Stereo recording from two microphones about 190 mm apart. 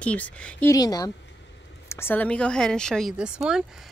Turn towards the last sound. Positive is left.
turn(degrees=-5)  # may be behind; listen again after turning